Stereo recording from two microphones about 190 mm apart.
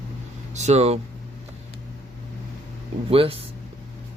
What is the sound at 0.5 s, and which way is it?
Speech, 35° right (ahead or behind).